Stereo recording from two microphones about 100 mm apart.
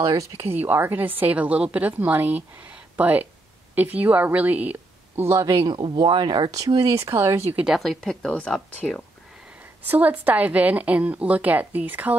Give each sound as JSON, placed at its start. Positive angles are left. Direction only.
{"t": 0.2, "sound": "a woman's voice", "side_deg": -25}
{"t": 5.8, "sound": "speech", "side_deg": -60}
{"t": 6.8, "sound": "speech", "side_deg": -30}
{"t": 7.5, "sound": "speech", "side_deg": -5}
{"t": 9.8, "sound": "speech", "side_deg": -15}